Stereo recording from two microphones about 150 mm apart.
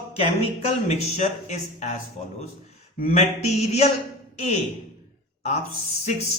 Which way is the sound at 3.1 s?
45° left (ahead or behind).